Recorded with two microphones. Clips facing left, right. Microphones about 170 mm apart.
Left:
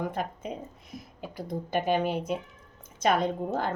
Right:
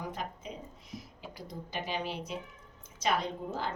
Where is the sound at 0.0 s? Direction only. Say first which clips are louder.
Left 7 dB; 55° left (ahead or behind).